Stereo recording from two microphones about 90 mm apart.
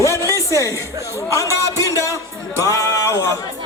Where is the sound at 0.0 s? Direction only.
35° left (ahead or behind).